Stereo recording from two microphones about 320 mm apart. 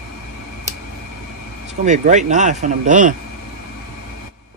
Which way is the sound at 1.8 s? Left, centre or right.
Right.